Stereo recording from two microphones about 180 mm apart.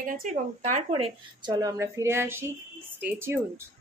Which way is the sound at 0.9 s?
30° right (ahead or behind).